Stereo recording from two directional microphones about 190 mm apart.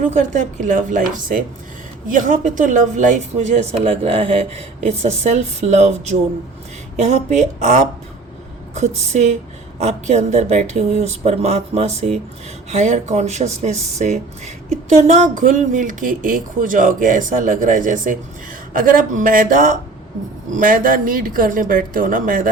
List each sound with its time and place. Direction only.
0.0 s speech: 40° right (ahead or behind)